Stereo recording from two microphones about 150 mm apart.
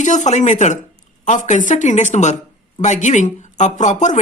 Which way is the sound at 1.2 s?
55° left (ahead or behind).